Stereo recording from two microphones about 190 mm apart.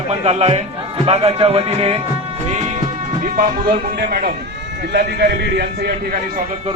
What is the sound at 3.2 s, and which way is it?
Speech, 50° right (ahead or behind).